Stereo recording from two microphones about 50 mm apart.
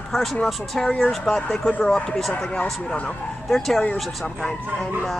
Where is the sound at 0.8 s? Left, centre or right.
Centre.